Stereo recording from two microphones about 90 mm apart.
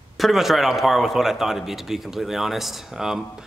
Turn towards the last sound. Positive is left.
turn(degrees=-5)  # may be behind; listen again after turning